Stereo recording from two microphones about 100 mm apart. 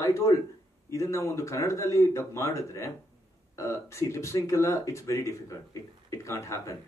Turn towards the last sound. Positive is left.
turn(degrees=30)  # may be behind; listen again after turning